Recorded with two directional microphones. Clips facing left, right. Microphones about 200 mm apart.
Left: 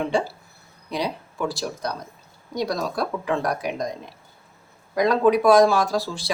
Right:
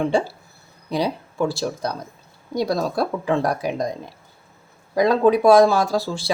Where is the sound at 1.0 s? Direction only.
25° right (ahead or behind).